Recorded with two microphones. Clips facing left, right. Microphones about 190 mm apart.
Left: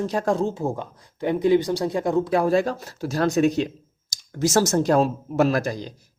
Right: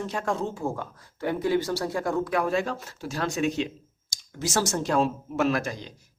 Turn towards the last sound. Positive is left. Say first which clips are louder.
# left 3 dB
turn(degrees=35)  # may be behind; listen again after turning